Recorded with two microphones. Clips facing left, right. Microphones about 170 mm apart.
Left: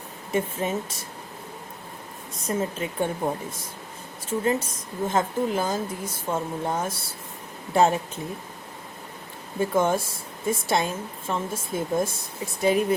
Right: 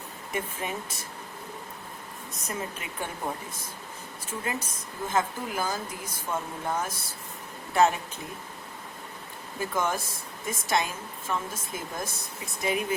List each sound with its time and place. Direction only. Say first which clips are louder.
0.3 s speech: left 7 dB; 30° left (ahead or behind)
2.4 s speech: left 9 dB; 30° left (ahead or behind)
9.6 s speech: left 7 dB; 25° left (ahead or behind)